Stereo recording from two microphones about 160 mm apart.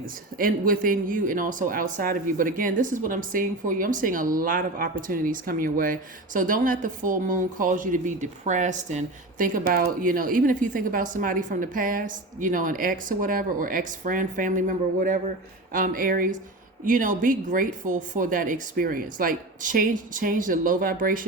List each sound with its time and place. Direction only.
0.0 s speech: 60° right (ahead or behind)